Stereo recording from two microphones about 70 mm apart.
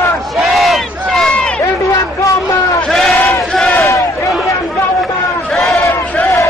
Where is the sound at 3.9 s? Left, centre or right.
Left.